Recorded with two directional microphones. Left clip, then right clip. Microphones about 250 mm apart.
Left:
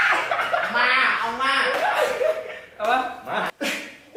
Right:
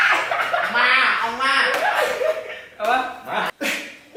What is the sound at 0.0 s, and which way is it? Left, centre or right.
Chuckle, centre.